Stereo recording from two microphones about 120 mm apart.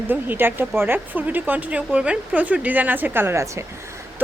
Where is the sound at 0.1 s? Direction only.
15° right (ahead or behind).